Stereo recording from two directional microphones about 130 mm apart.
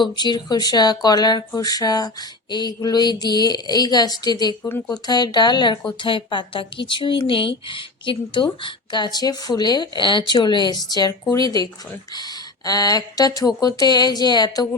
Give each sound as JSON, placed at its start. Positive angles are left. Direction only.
{"t": 0.0, "sound": "speech", "side_deg": 35}
{"t": 4.6, "sound": "speech", "side_deg": 20}
{"t": 5.0, "sound": "speech", "side_deg": 30}